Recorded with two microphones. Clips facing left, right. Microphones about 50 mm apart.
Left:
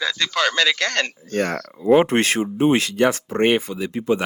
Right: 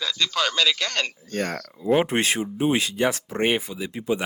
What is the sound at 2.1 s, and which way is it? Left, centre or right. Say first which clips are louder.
Speech: left 4 dB; left.